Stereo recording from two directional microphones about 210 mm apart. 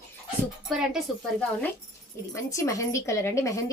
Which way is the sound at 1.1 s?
Centre (ahead or behind).